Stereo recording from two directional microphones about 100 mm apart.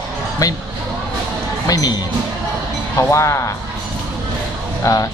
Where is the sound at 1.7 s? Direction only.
40° left (ahead or behind).